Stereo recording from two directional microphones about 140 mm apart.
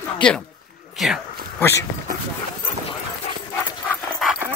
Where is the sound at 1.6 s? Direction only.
20° left (ahead or behind).